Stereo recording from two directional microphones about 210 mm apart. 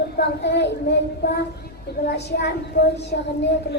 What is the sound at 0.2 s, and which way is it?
A woman's voice, 50° left (ahead or behind).